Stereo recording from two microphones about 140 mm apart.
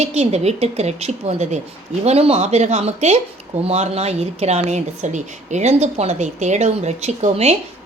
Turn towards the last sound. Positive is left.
turn(degrees=-50)  # may be behind; listen again after turning